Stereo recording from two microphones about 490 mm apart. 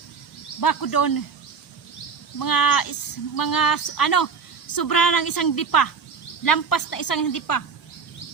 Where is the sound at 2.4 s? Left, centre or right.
Left.